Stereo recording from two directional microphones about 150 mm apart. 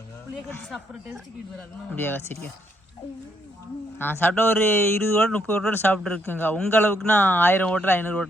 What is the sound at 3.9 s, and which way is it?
A man's voice, 15° left (ahead or behind).